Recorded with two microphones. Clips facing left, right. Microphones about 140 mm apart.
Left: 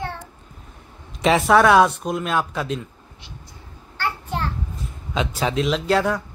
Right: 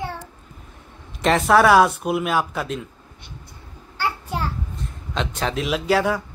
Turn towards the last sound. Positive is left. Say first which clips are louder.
# even
turn(degrees=-5)  # may be behind; listen again after turning